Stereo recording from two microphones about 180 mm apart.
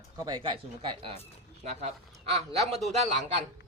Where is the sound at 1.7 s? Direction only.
40° right (ahead or behind).